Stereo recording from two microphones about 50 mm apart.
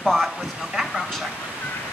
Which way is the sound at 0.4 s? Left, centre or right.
Centre.